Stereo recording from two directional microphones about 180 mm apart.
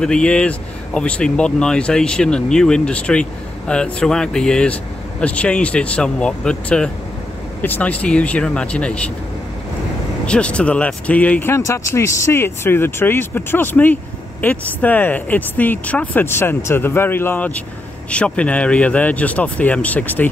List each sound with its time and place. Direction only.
0.0 s speech: 5° left (ahead or behind)
10.2 s speech: 5° left (ahead or behind)